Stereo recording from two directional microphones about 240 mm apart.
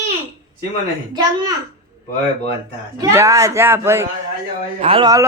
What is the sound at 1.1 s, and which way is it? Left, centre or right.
Speech, centre.